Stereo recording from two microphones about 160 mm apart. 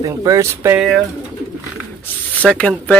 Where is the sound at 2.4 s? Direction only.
5° left (ahead or behind).